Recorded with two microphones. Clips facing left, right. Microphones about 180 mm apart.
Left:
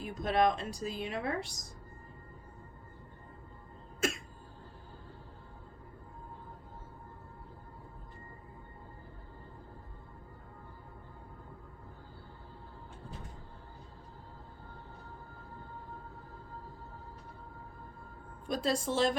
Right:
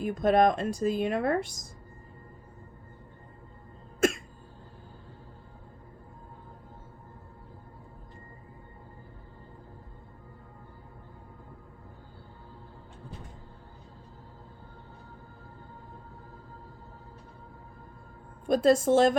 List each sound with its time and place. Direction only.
0.0 s speech: 50° right (ahead or behind)
4.0 s cough: 50° right (ahead or behind)
18.4 s speech: 50° right (ahead or behind)